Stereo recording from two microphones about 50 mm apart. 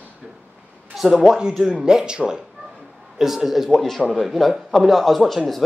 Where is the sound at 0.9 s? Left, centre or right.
Centre.